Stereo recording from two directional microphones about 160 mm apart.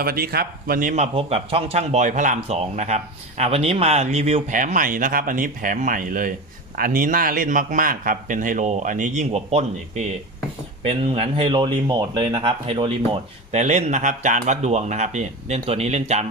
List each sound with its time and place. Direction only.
0.0 s a man's voice: 70° right (ahead or behind); by 16.2 s 45° right (ahead or behind)